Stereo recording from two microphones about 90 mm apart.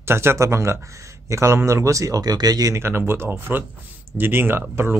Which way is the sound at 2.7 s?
25° right (ahead or behind).